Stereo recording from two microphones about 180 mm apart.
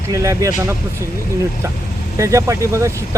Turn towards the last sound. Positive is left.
turn(degrees=-15)  # may be behind; listen again after turning